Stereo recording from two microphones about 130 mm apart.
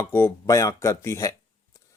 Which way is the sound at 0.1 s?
20° left (ahead or behind).